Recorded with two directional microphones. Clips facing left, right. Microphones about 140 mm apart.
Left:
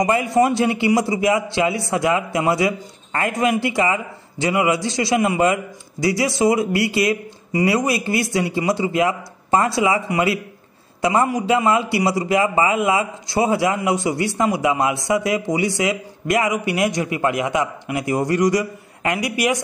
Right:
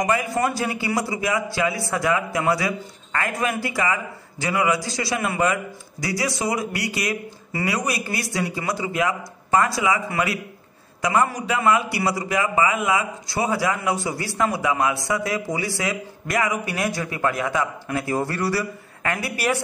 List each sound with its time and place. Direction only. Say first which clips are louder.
0.0 s a man's voice: left 5 dB; 25° left (ahead or behind)